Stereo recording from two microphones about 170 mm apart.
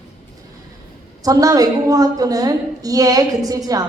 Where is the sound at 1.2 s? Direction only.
20° right (ahead or behind).